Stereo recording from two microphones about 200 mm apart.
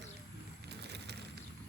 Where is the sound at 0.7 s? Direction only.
55° right (ahead or behind).